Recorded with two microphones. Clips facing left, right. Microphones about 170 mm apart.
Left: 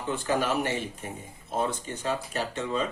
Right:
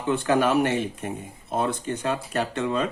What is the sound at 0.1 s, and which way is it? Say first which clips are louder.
Speech: right 6 dB; 65° right (ahead or behind).